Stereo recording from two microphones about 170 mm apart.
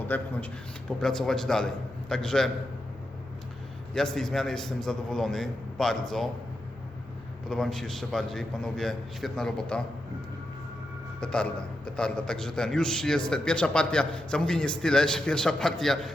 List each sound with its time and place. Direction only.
0.1 s a man's voice: 10° left (ahead or behind)
3.9 s a man's voice: 5° left (ahead or behind)
7.5 s a man's voice: 5° left (ahead or behind)
11.2 s a man's voice: 5° left (ahead or behind)